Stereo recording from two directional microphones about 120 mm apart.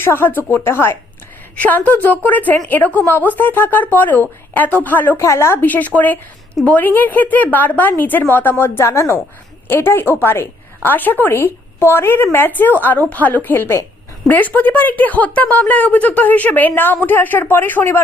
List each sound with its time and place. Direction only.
0.0 s a woman's voice: 20° left (ahead or behind)